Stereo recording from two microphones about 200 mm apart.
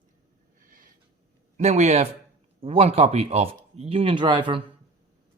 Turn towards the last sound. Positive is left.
turn(degrees=-25)  # may be behind; listen again after turning